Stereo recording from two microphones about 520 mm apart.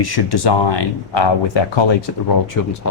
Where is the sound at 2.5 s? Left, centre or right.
Left.